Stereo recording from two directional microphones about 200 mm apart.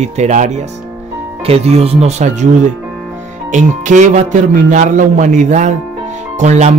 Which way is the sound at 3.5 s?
35° right (ahead or behind).